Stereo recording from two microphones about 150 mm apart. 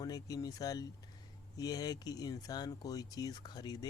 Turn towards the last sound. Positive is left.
turn(degrees=25)  # may be behind; listen again after turning